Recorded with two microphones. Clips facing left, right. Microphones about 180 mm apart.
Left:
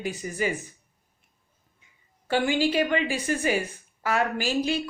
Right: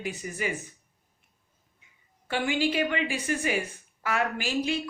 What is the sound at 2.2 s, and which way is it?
Speech, 35° left (ahead or behind).